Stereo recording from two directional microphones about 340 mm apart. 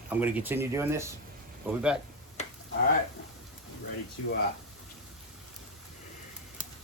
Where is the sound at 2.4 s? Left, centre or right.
Centre.